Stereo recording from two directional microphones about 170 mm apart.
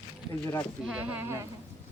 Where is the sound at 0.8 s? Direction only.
10° right (ahead or behind).